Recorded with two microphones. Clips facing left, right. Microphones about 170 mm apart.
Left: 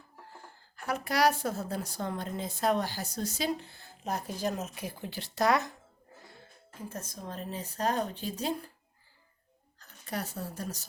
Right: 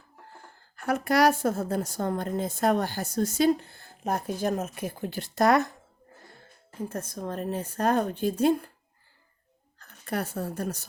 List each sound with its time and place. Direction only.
0.9 s a woman's voice: 50° right (ahead or behind)
6.8 s speech: 55° right (ahead or behind)
9.7 s a woman's voice: 60° right (ahead or behind)